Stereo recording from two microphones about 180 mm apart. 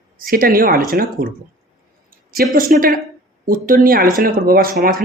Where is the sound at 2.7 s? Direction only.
55° right (ahead or behind).